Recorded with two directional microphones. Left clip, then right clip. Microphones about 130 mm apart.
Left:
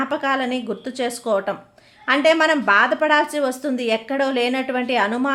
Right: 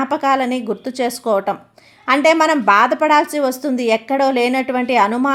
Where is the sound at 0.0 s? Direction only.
25° right (ahead or behind).